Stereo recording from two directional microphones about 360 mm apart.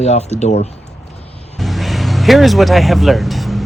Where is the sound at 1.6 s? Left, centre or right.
Centre.